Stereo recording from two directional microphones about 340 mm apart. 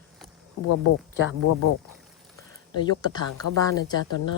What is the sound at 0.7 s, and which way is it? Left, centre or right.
Speech, left.